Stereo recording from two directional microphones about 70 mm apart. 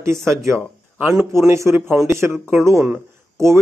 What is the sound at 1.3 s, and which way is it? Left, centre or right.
A man's voice, right.